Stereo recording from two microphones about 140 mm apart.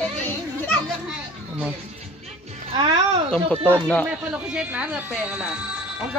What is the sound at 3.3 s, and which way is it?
Speech, 10° left (ahead or behind).